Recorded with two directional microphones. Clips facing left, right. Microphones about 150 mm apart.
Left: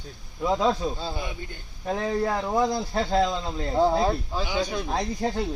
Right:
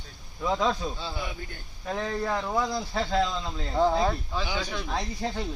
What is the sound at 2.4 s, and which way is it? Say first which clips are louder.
Speech: left 4 dB; 20° left (ahead or behind).